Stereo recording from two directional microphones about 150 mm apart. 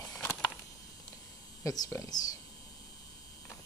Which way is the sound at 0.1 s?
20° left (ahead or behind).